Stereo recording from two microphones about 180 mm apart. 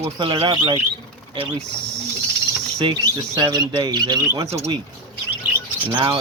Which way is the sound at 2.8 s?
25° right (ahead or behind).